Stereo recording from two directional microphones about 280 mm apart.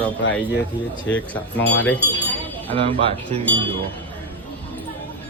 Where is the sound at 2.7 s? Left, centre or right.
Right.